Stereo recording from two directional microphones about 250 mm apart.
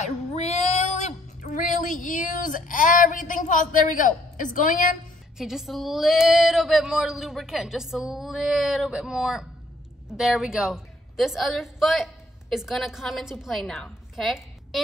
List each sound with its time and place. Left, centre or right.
0.0 s female singing: left
5.4 s a woman's voice: centre